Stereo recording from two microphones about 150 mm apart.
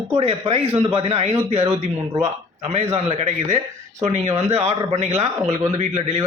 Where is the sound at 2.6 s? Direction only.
45° right (ahead or behind).